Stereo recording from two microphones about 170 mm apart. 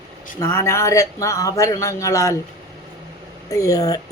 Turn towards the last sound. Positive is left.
turn(degrees=20)  # may be behind; listen again after turning